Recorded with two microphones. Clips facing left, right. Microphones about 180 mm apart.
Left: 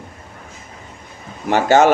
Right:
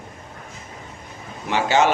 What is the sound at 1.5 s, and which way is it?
Speech, 50° left (ahead or behind).